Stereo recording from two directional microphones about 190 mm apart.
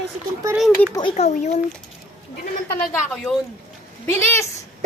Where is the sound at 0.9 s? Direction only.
30° left (ahead or behind).